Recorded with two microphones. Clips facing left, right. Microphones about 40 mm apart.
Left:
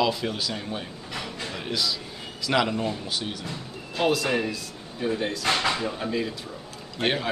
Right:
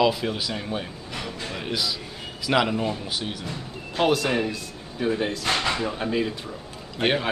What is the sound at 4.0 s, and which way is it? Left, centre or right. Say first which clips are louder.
Speech: right 2 dB; right.